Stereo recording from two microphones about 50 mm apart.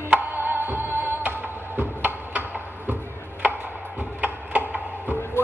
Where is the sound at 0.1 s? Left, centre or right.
Right.